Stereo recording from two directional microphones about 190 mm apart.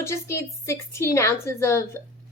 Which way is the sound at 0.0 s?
15° left (ahead or behind).